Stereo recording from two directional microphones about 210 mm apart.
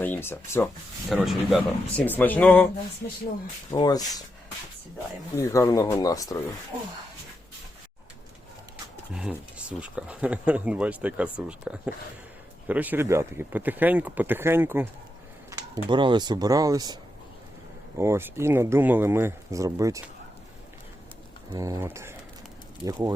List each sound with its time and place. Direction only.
0.0 s speech: 10° left (ahead or behind)
1.1 s speech: centre (ahead or behind)
3.8 s speech: 20° left (ahead or behind)
5.4 s speech: 15° left (ahead or behind)
9.1 s speech: 5° right (ahead or behind)
15.4 s a sound: 15° right (ahead or behind)
15.9 s speech: 20° right (ahead or behind)
21.5 s speech: 15° right (ahead or behind)